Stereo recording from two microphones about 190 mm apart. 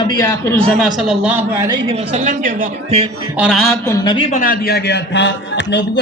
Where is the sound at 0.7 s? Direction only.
Centre (ahead or behind).